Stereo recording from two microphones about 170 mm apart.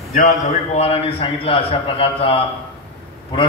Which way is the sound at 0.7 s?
35° left (ahead or behind).